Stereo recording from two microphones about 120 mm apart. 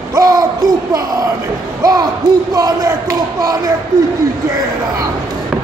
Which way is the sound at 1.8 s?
30° right (ahead or behind).